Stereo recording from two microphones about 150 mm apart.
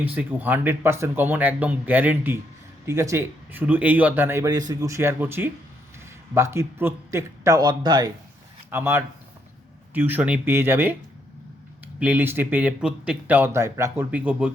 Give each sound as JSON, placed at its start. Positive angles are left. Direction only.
{"t": 0.0, "sound": "speech", "side_deg": -10}
{"t": 8.7, "sound": "speech", "side_deg": -15}
{"t": 11.9, "sound": "speech", "side_deg": -10}